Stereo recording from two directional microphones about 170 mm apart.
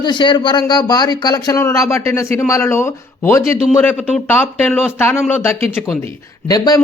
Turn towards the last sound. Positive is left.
turn(degrees=20)  # may be behind; listen again after turning